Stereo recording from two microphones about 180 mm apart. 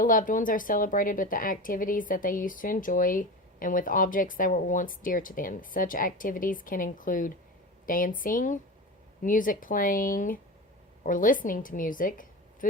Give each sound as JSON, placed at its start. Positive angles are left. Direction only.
{"t": 0.0, "sound": "a woman's voice", "side_deg": 50}